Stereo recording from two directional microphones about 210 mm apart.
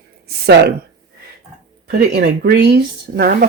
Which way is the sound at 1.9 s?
45° right (ahead or behind).